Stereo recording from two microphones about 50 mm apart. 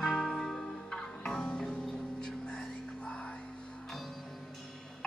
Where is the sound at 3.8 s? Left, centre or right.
Centre.